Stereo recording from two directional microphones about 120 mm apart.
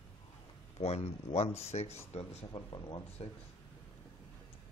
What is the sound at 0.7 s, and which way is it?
Speech, 60° left (ahead or behind).